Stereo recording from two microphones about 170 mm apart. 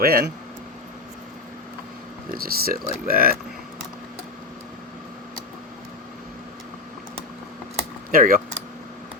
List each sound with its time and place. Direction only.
0.0 s speech: 65° right (ahead or behind)
2.3 s speech: 60° right (ahead or behind)
8.1 s speech: 55° right (ahead or behind)